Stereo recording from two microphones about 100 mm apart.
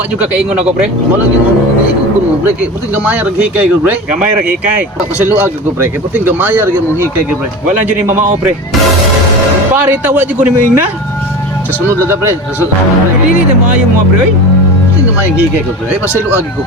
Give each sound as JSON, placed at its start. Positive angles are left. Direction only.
{"t": 0.2, "sound": "speech", "side_deg": -10}
{"t": 2.9, "sound": "speech", "side_deg": -15}
{"t": 7.9, "sound": "a man's voice", "side_deg": -20}
{"t": 9.9, "sound": "speech", "side_deg": -15}